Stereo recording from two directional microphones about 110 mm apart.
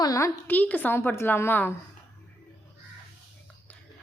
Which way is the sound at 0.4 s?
15° left (ahead or behind).